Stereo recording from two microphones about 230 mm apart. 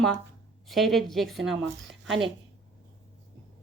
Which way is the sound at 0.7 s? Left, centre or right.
Centre.